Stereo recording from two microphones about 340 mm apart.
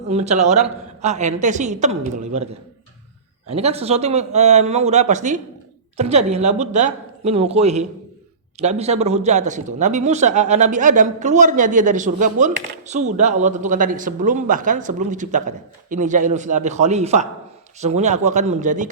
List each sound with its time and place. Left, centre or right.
0.1 s speech: centre
3.5 s speech: centre